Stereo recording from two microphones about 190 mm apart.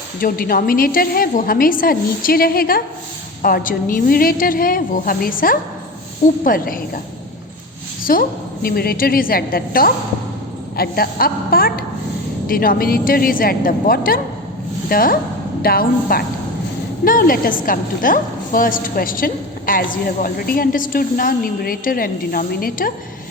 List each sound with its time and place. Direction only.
0.2 s a woman's voice: 50° left (ahead or behind)
8.1 s a woman's voice: 50° left (ahead or behind)